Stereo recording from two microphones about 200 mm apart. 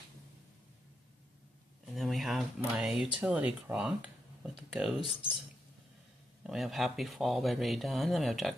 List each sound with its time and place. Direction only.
2.0 s speech: centre (ahead or behind)
6.4 s speech: centre (ahead or behind)